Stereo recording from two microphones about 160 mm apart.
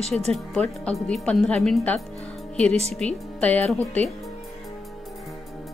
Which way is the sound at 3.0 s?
5° left (ahead or behind).